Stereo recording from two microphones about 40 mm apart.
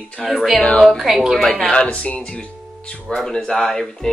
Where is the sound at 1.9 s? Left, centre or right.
Left.